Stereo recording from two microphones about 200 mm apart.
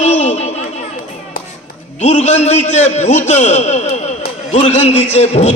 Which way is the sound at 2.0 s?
35° left (ahead or behind).